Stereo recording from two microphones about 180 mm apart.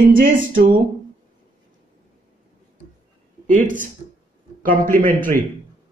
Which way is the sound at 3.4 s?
45° right (ahead or behind).